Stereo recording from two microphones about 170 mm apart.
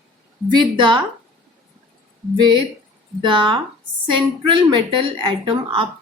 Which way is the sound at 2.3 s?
30° right (ahead or behind).